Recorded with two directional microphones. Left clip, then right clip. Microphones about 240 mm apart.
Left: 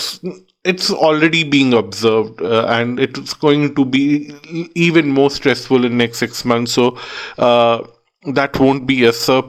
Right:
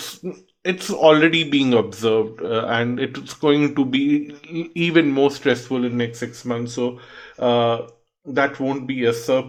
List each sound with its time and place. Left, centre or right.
0.3 s speech: left